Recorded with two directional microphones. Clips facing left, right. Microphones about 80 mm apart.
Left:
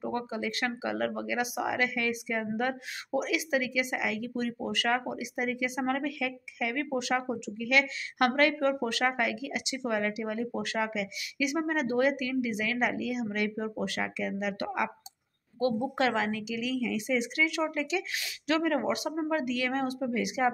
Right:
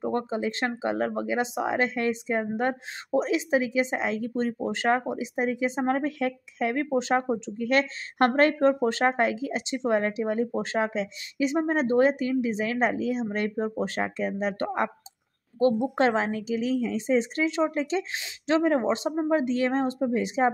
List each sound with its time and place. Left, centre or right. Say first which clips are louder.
0.0 s speech: right 5 dB; right